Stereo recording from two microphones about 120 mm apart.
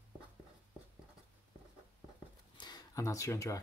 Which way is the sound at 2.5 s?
35° left (ahead or behind).